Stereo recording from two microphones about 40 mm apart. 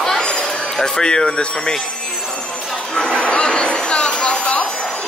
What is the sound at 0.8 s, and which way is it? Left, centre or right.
Speech, centre.